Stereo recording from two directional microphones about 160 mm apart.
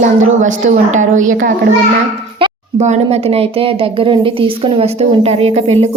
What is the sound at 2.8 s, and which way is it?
A woman's voice, 45° right (ahead or behind).